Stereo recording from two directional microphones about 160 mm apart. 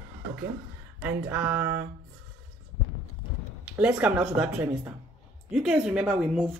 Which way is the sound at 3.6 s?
5° right (ahead or behind).